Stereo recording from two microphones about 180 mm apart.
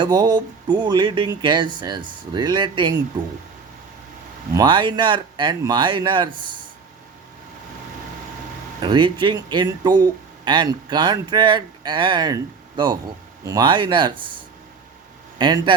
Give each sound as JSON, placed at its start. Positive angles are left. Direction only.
{"t": 0.0, "sound": "speech", "side_deg": -25}
{"t": 4.5, "sound": "speech", "side_deg": -25}
{"t": 8.8, "sound": "speech", "side_deg": -25}
{"t": 15.4, "sound": "speech", "side_deg": -25}